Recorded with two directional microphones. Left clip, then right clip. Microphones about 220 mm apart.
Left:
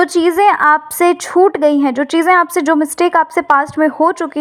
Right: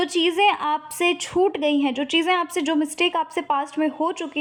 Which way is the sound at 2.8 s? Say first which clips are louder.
Left 10 dB; 20° left (ahead or behind).